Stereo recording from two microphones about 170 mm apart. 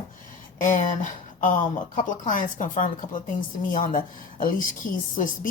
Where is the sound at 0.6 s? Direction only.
50° left (ahead or behind).